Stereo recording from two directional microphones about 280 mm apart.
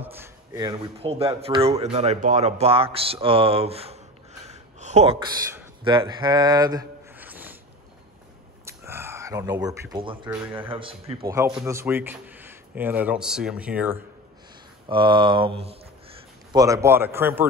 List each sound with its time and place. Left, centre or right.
0.0 s speech: centre
4.5 s a sound: right; by 7.5 s centre
8.6 s speech: centre
11.2 s a man's voice: centre
14.9 s a man's voice: centre